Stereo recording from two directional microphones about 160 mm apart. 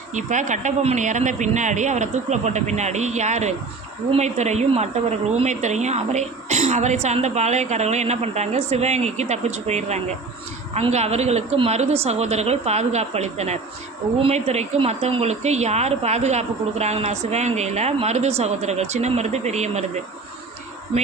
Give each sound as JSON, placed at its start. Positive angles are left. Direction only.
{"t": 0.1, "sound": "a woman's voice", "side_deg": -50}